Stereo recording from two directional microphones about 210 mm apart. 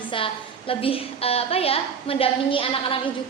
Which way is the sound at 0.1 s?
25° left (ahead or behind).